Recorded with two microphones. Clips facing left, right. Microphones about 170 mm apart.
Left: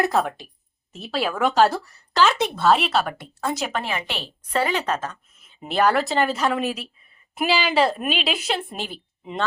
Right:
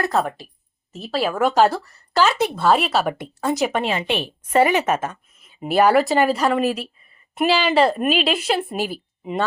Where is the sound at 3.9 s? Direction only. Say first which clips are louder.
Right 6 dB; 25° right (ahead or behind).